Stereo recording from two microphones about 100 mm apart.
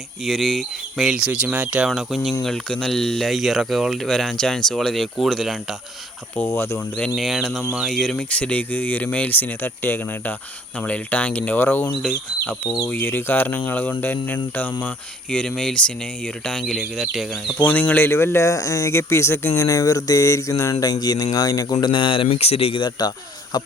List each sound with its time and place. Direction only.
0.3 s speech: 5° left (ahead or behind); by 1.9 s 15° right (ahead or behind)
1.9 s speech: centre (ahead or behind)
6.3 s speech: 25° left (ahead or behind)
6.7 s speech: 15° left (ahead or behind)
7.2 s speech: centre (ahead or behind)
17.6 s speech: 15° left (ahead or behind); by 22.8 s 85° left
22.8 s speech: 40° left (ahead or behind)